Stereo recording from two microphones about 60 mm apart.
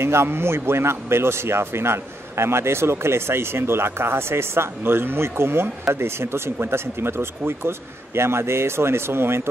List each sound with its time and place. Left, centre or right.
0.0 s speech: right